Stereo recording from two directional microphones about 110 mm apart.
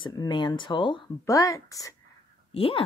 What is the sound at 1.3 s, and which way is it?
Speech, 30° left (ahead or behind).